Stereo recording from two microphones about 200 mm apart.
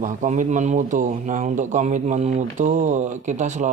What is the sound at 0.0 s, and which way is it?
Speech, 40° right (ahead or behind).